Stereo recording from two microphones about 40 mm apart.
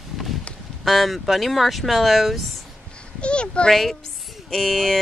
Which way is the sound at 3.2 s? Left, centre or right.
Left.